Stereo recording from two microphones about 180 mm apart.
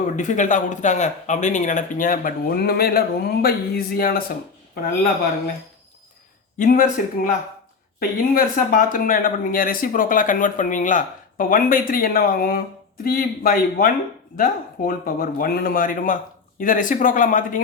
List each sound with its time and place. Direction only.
0.0 s speech: 45° left (ahead or behind)
6.6 s speech: 50° left (ahead or behind)